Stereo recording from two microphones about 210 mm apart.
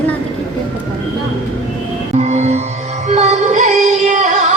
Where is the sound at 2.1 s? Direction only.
30° right (ahead or behind).